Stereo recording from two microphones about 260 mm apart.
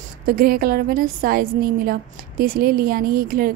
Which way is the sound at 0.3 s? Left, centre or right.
Right.